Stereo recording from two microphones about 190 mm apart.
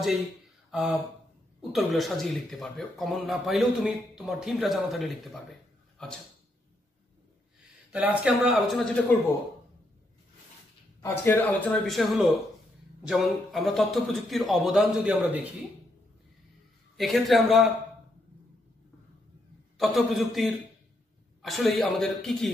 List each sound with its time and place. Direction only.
0.7 s speech: centre (ahead or behind)
7.9 s speech: 5° right (ahead or behind)
11.0 s speech: 15° left (ahead or behind); by 15.5 s 10° right (ahead or behind)
16.9 s speech: centre (ahead or behind)
19.8 s speech: centre (ahead or behind)